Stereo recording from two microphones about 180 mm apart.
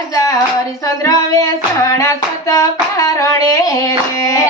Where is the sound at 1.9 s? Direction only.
15° left (ahead or behind).